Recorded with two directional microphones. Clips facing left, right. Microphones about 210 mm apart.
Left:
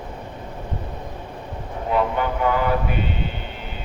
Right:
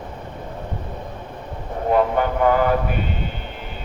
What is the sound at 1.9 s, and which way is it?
Speech, 45° right (ahead or behind).